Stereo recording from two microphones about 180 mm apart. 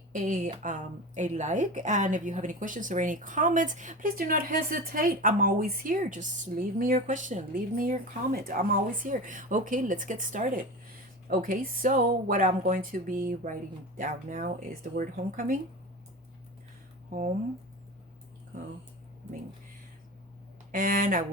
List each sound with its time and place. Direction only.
0.1 s speech: 45° right (ahead or behind)
17.1 s speech: 50° right (ahead or behind)
20.7 s speech: 50° right (ahead or behind)